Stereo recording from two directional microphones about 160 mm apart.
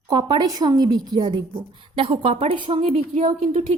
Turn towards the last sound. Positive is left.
turn(degrees=-40)  # may be behind; listen again after turning